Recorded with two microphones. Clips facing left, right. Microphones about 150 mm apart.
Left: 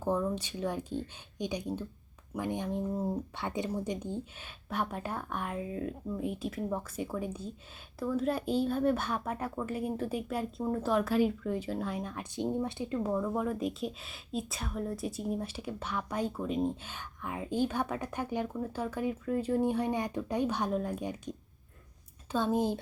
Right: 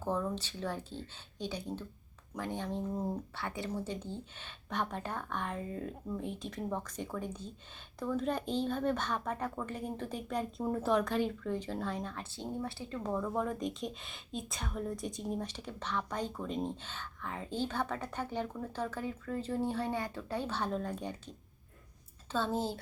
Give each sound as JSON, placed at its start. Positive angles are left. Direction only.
{"t": 0.0, "sound": "speech", "side_deg": 10}